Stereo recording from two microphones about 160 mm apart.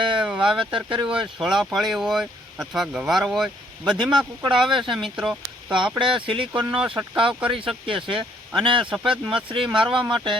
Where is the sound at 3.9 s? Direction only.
30° right (ahead or behind).